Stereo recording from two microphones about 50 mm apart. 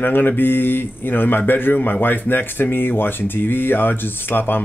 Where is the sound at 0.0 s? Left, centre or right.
Left.